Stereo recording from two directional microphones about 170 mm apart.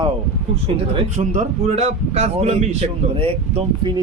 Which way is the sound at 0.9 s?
45° right (ahead or behind).